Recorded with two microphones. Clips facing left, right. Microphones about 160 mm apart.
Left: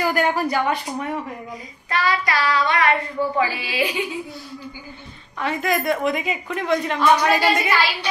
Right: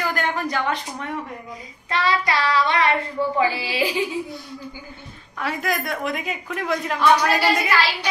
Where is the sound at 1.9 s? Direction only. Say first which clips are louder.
Even; 25° right (ahead or behind).